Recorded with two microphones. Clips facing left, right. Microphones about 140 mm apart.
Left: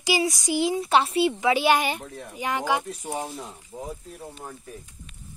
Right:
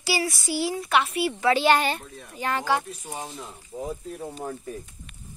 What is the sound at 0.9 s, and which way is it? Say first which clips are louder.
Speech: left 2 dB; 30° left (ahead or behind).